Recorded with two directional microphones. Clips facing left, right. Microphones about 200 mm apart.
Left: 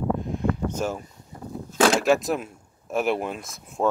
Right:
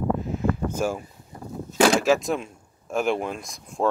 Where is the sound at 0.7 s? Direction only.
10° right (ahead or behind).